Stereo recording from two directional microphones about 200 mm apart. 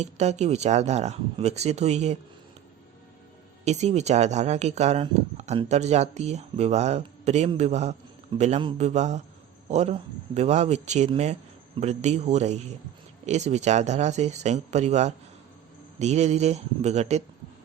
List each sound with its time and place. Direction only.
0.0 s speech: 35° right (ahead or behind)
3.6 s speech: 35° right (ahead or behind)